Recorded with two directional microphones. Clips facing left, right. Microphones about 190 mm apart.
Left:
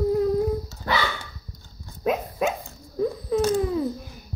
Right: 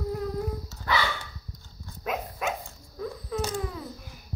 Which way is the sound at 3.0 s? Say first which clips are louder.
Left 9 dB; 25° left (ahead or behind).